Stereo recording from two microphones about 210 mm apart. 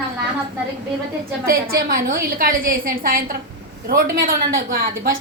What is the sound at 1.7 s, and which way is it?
A woman's voice, 45° right (ahead or behind).